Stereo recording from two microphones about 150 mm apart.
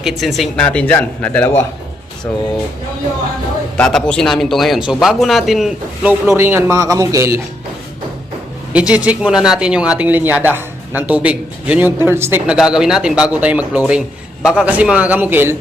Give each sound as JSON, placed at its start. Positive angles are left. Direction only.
{"t": 0.0, "sound": "a man's voice", "side_deg": 0}
{"t": 3.8, "sound": "a man's voice", "side_deg": 5}
{"t": 6.2, "sound": "speech", "side_deg": -15}
{"t": 8.7, "sound": "speech", "side_deg": -10}
{"t": 12.5, "sound": "speech", "side_deg": -5}